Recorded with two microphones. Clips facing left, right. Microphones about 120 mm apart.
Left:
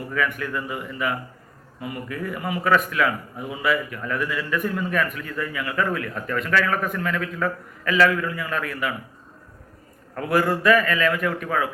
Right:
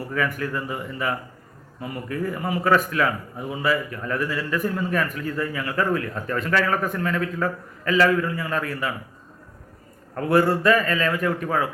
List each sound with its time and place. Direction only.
0.1 s a man's voice: 35° right (ahead or behind)
10.2 s a man's voice: 30° right (ahead or behind)